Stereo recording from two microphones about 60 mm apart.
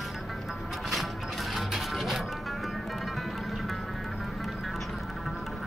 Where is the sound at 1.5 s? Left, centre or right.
Centre.